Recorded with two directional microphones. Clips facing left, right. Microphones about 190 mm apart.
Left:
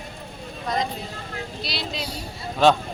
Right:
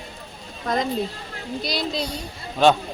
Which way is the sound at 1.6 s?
45° right (ahead or behind).